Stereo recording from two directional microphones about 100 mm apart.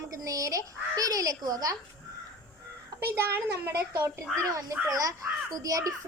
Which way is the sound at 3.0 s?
25° right (ahead or behind).